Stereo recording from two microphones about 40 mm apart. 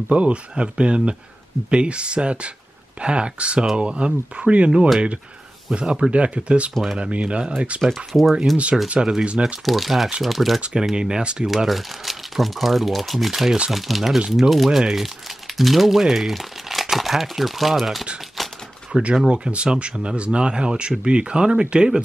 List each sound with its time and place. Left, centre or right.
0.1 s speech: right
6.1 s speech: right
7.8 s speech: centre
10.6 s speech: centre
11.4 s speech: centre
18.4 s typewriter: centre
18.9 s speech: centre
19.3 s speech: right